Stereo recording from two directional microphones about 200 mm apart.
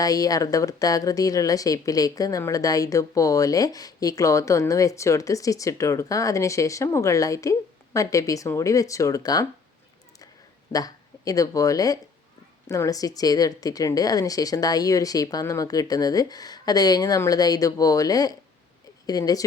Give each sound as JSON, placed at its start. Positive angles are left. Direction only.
{"t": 0.0, "sound": "a woman's voice", "side_deg": 20}
{"t": 10.7, "sound": "speech", "side_deg": 20}